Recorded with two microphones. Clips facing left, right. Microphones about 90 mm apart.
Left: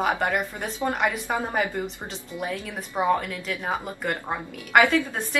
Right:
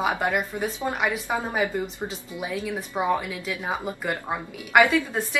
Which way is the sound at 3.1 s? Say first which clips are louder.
Left 1 dB; 5° right (ahead or behind).